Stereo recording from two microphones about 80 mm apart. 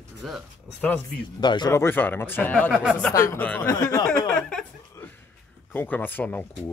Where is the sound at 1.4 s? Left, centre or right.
Left.